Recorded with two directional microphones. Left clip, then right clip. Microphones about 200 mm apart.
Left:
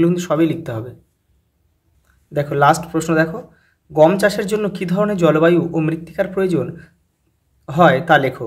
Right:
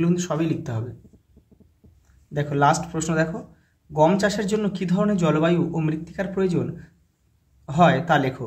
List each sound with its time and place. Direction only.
0.0 s speech: 25° left (ahead or behind)
2.3 s speech: 25° left (ahead or behind)